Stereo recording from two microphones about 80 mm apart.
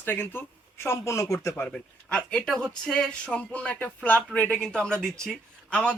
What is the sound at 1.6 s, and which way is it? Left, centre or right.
A man's voice, centre.